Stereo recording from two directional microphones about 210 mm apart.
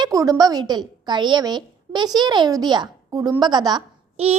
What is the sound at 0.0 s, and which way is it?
A woman's voice, 15° right (ahead or behind).